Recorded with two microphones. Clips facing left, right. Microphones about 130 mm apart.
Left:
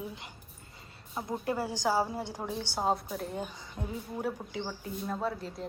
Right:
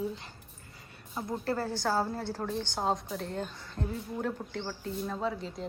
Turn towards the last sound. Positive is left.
turn(degrees=0)  # may be behind; listen again after turning